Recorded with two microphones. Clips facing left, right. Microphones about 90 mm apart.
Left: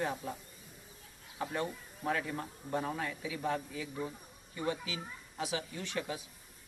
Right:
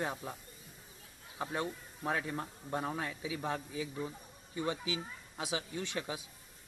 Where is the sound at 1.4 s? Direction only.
20° right (ahead or behind).